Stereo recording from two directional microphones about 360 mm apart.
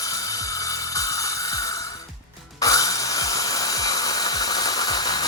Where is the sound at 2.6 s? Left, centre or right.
Centre.